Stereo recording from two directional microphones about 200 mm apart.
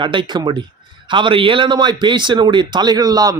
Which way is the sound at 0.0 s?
25° right (ahead or behind).